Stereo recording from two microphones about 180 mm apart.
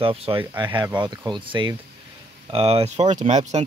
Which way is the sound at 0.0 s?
30° right (ahead or behind).